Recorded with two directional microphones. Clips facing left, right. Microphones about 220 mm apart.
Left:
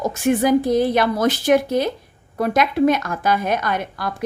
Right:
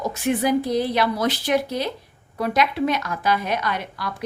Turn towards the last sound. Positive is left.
turn(degrees=50)  # may be behind; listen again after turning